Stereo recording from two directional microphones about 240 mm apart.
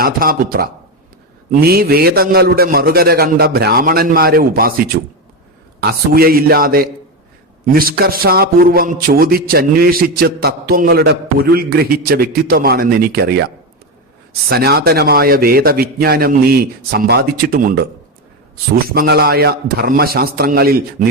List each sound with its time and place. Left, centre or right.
0.0 s a man's voice: right
14.5 s a man's voice: right
18.9 s a man's voice: right